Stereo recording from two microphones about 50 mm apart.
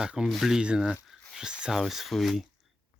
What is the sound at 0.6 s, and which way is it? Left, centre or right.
Speech, right.